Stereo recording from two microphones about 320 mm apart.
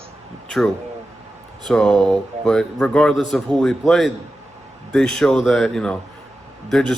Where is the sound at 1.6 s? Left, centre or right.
Centre.